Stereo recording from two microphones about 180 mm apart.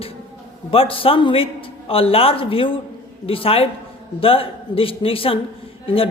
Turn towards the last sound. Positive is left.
turn(degrees=30)  # may be behind; listen again after turning